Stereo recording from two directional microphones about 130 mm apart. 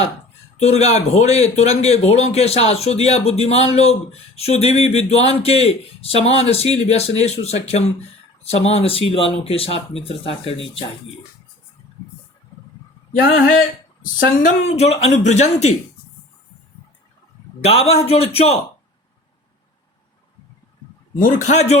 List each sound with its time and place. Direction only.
0.6 s a man's voice: 55° left (ahead or behind)
14.0 s a woman's voice: 90° left
14.7 s speech: 55° left (ahead or behind)
17.6 s a man's voice: 50° left (ahead or behind)
21.2 s a man's voice: 85° left; by 21.8 s 60° left (ahead or behind)